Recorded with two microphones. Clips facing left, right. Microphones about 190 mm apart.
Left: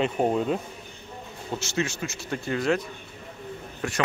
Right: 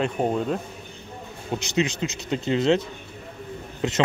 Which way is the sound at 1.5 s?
15° right (ahead or behind).